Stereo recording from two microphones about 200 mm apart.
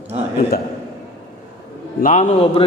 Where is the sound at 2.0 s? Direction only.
40° left (ahead or behind).